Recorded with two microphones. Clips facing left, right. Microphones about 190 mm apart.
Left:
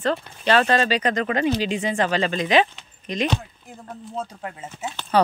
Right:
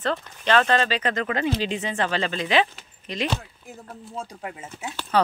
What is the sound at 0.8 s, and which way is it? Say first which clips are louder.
Speech: left 3 dB; 15° left (ahead or behind).